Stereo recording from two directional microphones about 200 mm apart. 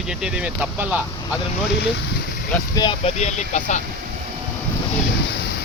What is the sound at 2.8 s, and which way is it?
Speech, 20° left (ahead or behind).